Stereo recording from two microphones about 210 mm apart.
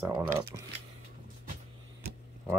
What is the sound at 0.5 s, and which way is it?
Speech, 20° right (ahead or behind).